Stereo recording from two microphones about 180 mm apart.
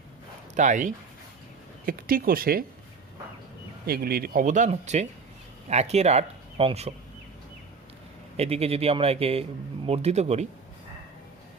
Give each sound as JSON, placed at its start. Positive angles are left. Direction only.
{"t": 0.5, "sound": "speech", "side_deg": -45}
{"t": 3.8, "sound": "speech", "side_deg": -55}
{"t": 8.4, "sound": "a man's voice", "side_deg": -35}